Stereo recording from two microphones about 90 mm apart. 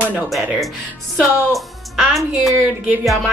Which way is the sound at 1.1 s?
Centre (ahead or behind).